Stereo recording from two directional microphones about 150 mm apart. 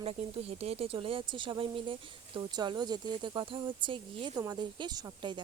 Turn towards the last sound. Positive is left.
turn(degrees=-30)  # may be behind; listen again after turning